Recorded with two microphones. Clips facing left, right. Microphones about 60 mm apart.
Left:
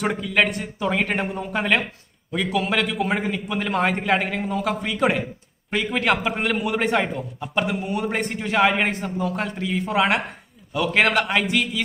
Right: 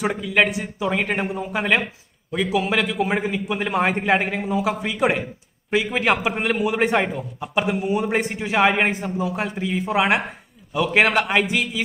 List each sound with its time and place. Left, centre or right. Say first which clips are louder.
0.0 s a man's voice: right 1 dB; centre